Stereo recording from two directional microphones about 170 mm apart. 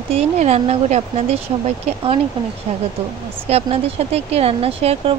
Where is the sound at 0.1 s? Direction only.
40° right (ahead or behind).